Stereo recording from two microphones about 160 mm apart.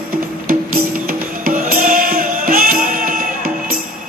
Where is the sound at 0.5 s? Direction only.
65° right (ahead or behind).